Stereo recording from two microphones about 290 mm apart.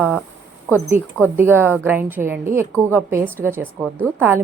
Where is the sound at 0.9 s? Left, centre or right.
Centre.